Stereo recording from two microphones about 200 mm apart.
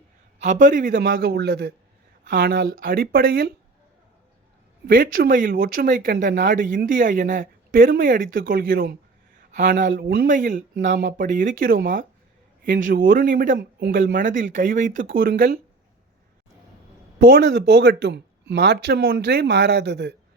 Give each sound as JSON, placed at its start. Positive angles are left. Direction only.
{"t": 0.3, "sound": "speech", "side_deg": -40}
{"t": 4.9, "sound": "speech", "side_deg": -45}
{"t": 17.2, "sound": "speech", "side_deg": -50}